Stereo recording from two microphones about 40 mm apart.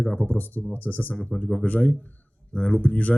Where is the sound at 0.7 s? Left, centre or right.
Left.